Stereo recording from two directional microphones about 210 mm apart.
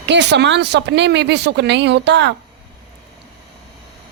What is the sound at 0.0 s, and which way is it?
Speech, 55° right (ahead or behind).